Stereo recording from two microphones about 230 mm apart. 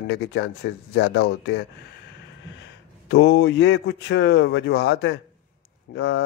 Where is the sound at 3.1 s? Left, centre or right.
Left.